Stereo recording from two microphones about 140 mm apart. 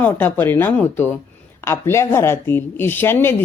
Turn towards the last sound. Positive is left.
turn(degrees=15)  # may be behind; listen again after turning